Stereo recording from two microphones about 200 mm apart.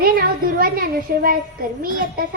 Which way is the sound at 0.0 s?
45° right (ahead or behind).